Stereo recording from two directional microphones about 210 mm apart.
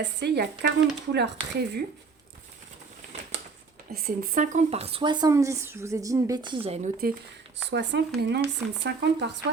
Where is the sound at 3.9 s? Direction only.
45° right (ahead or behind).